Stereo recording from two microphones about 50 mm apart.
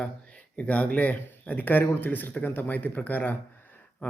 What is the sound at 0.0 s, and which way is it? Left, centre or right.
A man's voice, left.